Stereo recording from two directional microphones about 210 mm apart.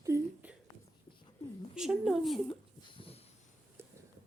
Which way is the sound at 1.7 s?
Centre (ahead or behind).